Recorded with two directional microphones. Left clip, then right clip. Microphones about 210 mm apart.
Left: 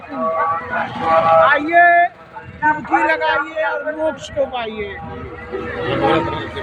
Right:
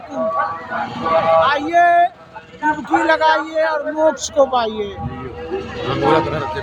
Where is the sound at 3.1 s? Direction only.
25° right (ahead or behind).